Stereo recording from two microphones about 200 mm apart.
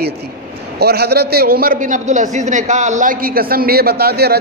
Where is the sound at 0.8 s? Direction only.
50° right (ahead or behind).